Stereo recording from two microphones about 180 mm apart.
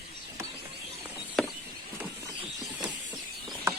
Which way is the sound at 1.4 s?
Centre (ahead or behind).